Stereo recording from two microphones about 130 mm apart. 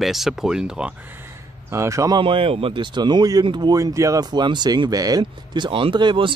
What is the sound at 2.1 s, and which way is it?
Speech, 45° right (ahead or behind).